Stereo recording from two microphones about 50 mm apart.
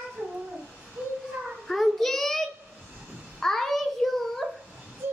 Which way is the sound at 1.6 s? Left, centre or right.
Centre.